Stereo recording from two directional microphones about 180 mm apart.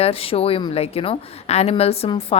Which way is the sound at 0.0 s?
30° left (ahead or behind).